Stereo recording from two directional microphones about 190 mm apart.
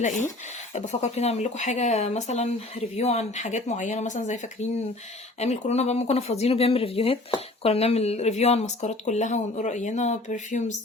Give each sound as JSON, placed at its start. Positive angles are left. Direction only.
{"t": 0.0, "sound": "speech", "side_deg": 40}
{"t": 5.4, "sound": "speech", "side_deg": 35}